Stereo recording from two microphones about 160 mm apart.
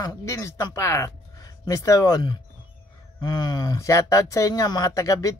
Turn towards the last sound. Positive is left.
turn(degrees=20)  # may be behind; listen again after turning